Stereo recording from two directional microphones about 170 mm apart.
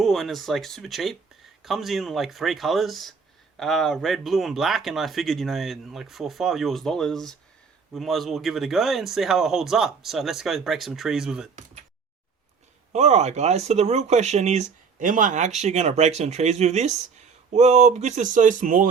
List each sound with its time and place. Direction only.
0.0 s speech: centre (ahead or behind)
12.9 s speech: 40° right (ahead or behind)